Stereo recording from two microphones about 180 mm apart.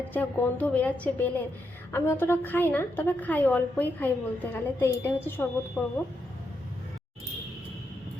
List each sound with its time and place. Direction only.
0.1 s a woman's voice: 10° left (ahead or behind)